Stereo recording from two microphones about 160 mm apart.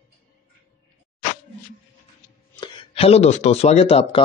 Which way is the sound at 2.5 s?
30° left (ahead or behind).